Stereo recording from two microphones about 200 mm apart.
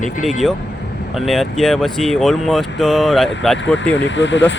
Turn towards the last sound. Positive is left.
turn(degrees=65)  # may be behind; listen again after turning